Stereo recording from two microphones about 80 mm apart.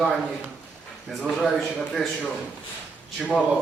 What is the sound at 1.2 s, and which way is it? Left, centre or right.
Speech, centre.